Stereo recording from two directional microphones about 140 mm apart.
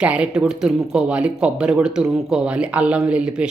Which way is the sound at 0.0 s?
10° right (ahead or behind).